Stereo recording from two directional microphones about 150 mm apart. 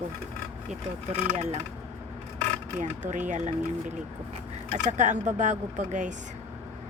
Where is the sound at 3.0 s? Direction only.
55° right (ahead or behind).